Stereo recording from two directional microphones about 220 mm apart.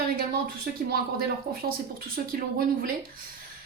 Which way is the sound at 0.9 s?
45° right (ahead or behind).